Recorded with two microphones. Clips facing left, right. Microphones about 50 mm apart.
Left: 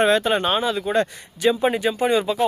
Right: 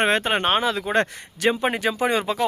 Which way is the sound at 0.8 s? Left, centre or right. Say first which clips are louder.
Left 1 dB; right.